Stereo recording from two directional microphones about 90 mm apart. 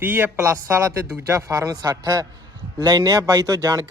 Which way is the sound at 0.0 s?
20° right (ahead or behind).